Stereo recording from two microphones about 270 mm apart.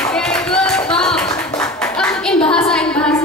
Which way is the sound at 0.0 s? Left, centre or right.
Centre.